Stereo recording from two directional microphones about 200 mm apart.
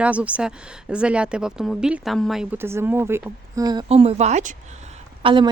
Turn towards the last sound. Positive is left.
turn(degrees=-25)  # may be behind; listen again after turning